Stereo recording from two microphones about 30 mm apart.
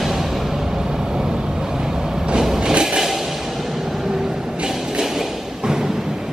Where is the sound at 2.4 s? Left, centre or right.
Right.